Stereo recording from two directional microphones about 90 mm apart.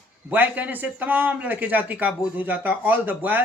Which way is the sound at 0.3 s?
15° right (ahead or behind).